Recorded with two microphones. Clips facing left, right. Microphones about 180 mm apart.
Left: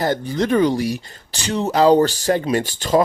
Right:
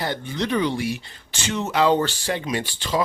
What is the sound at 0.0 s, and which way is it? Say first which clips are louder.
Speech: left 6 dB; 40° left (ahead or behind).